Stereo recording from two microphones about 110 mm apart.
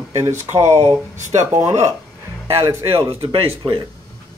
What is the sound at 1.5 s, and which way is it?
Speech, 25° right (ahead or behind).